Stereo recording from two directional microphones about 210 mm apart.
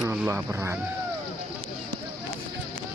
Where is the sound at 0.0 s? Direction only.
10° right (ahead or behind).